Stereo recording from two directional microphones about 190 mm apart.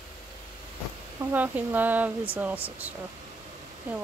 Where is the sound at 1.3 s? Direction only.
10° right (ahead or behind).